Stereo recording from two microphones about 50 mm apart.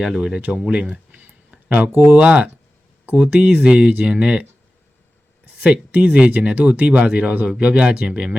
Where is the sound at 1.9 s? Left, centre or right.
Right.